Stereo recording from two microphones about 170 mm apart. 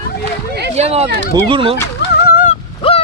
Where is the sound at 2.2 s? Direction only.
55° left (ahead or behind).